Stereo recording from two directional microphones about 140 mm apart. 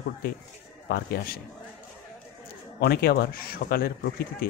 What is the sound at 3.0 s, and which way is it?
Speech, 90° left.